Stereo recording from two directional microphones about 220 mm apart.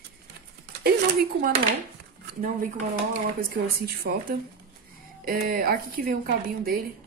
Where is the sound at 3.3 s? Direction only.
45° right (ahead or behind).